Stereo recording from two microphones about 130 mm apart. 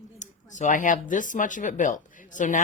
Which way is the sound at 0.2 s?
70° left (ahead or behind).